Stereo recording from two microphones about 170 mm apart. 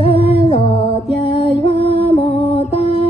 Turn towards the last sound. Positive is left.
turn(degrees=35)  # may be behind; listen again after turning